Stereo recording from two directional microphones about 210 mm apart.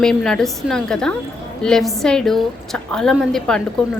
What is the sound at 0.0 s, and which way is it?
Speech, centre (ahead or behind).